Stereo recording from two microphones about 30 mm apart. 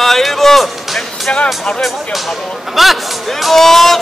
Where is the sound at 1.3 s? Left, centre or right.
Left.